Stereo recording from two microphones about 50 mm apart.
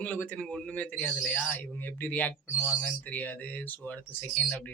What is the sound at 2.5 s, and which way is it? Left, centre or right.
Speech, left.